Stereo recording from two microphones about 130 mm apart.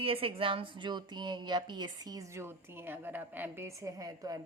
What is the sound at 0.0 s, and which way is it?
Speech, 45° right (ahead or behind).